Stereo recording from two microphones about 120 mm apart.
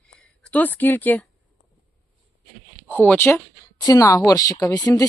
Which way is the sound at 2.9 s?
15° left (ahead or behind).